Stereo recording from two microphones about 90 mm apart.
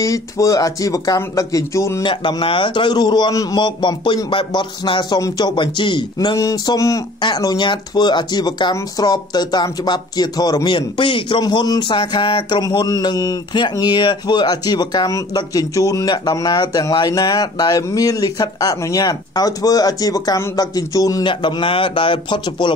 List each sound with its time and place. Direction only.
0.0 s speech: 35° left (ahead or behind)
2.0 s a man's voice: 65° left (ahead or behind)
6.1 s speech: 40° left (ahead or behind)
7.6 s speech: 55° left (ahead or behind)
10.7 s a man's voice: 65° left (ahead or behind)
11.4 s speech: 45° left (ahead or behind)
11.9 s a man's voice: 65° left (ahead or behind)
12.7 s speech: 50° left (ahead or behind)
21.2 s a man's voice: 65° left (ahead or behind)